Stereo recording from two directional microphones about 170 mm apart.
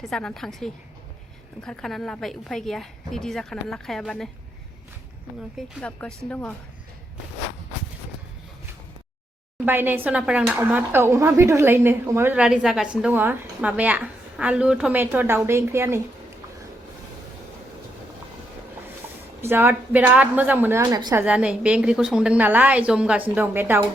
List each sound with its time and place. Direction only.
0.0 s a woman's voice: 5° left (ahead or behind)
5.5 s a woman's voice: 5° left (ahead or behind)
9.6 s speech: 10° right (ahead or behind)
19.4 s speech: 15° right (ahead or behind)
20.8 s a woman's voice: 25° right (ahead or behind)
21.2 s speech: 5° right (ahead or behind)